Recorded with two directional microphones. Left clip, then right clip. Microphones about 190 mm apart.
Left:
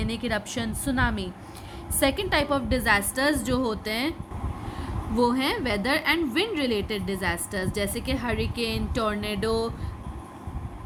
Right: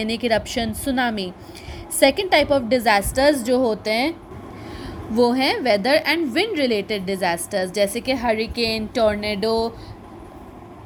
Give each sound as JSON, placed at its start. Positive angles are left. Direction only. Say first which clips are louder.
{"t": 0.0, "sound": "a woman's voice", "louder": "right 8 dB", "side_deg": -15}